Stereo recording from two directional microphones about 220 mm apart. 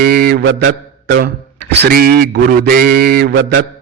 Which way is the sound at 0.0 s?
40° right (ahead or behind).